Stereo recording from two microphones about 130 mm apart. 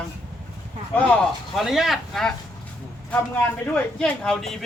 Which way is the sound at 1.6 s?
Centre (ahead or behind).